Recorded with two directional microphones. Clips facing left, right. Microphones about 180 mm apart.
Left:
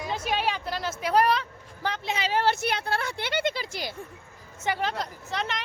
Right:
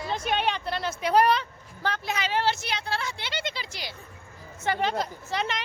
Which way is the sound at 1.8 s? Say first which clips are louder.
Even; 20° left (ahead or behind).